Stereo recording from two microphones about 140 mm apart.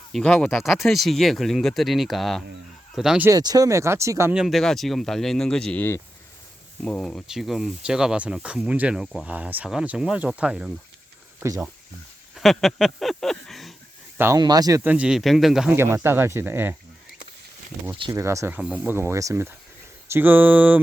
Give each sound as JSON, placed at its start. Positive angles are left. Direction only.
{"t": 0.1, "sound": "speech", "side_deg": 5}
{"t": 3.2, "sound": "speech", "side_deg": -25}
{"t": 4.4, "sound": "speech", "side_deg": 0}
{"t": 6.8, "sound": "speech", "side_deg": 10}
{"t": 11.3, "sound": "speech", "side_deg": -25}
{"t": 12.3, "sound": "speech", "side_deg": 0}
{"t": 14.3, "sound": "speech", "side_deg": -30}
{"t": 14.8, "sound": "speech", "side_deg": -10}
{"t": 15.7, "sound": "speech", "side_deg": -15}
{"t": 18.1, "sound": "speech", "side_deg": -20}